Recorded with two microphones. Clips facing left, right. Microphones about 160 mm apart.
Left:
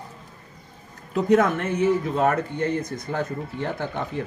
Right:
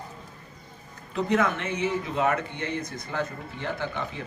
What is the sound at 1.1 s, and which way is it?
Speech, 45° left (ahead or behind).